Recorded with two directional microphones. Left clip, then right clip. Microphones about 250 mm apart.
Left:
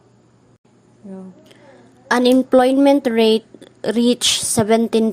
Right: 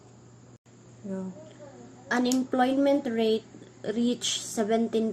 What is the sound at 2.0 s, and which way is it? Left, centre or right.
A woman's voice, left.